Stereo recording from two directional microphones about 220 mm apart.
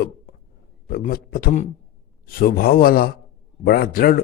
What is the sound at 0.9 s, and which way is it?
A man's voice, 40° left (ahead or behind).